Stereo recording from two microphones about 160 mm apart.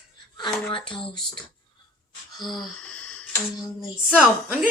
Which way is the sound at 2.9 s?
10° left (ahead or behind).